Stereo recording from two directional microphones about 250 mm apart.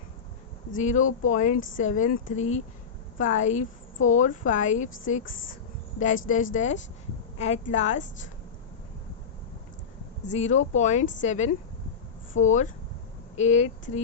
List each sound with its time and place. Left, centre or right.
0.7 s a woman's voice: left
10.3 s speech: left
12.3 s speech: left
13.3 s speech: left